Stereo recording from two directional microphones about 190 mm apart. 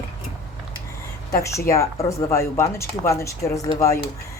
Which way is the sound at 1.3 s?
15° left (ahead or behind).